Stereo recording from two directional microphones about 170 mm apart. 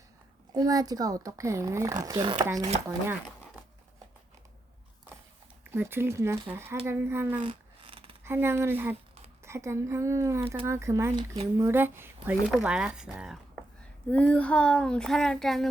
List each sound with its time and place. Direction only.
0.5 s a child's voice: 20° right (ahead or behind)
5.7 s a woman's voice: 15° right (ahead or behind)
7.4 s a sound: 30° right (ahead or behind)
8.2 s a woman's voice: 15° right (ahead or behind)
14.1 s speech: 10° left (ahead or behind)